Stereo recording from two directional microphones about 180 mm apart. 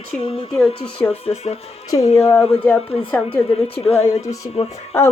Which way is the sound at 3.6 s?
35° left (ahead or behind).